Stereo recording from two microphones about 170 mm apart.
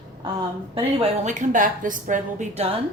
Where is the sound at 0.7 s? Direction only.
40° right (ahead or behind).